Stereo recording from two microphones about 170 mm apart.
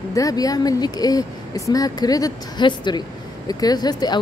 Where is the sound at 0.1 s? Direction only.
20° left (ahead or behind).